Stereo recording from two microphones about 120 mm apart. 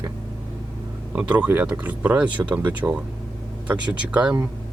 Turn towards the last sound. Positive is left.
turn(degrees=-10)  # may be behind; listen again after turning